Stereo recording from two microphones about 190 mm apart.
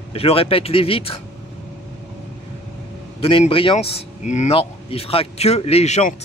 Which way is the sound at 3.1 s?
30° left (ahead or behind).